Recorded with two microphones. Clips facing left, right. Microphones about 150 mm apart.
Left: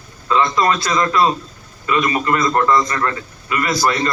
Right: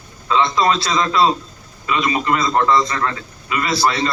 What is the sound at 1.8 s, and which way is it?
A man's voice, 15° right (ahead or behind).